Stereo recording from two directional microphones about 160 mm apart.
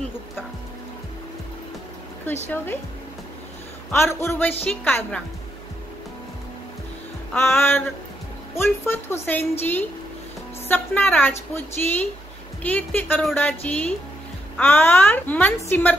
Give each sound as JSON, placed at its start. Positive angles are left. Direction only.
{"t": 2.4, "sound": "a woman's voice", "side_deg": 15}
{"t": 3.9, "sound": "a woman's voice", "side_deg": 15}
{"t": 7.3, "sound": "a woman's voice", "side_deg": 15}